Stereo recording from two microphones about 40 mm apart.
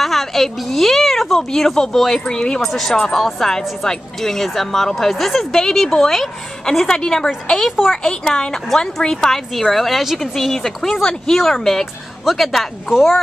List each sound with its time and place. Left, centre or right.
0.0 s a sound: centre
0.7 s a woman's voice: centre
2.7 s a woman's voice: centre
3.3 s a woman's voice: centre
6.9 s a woman's voice: centre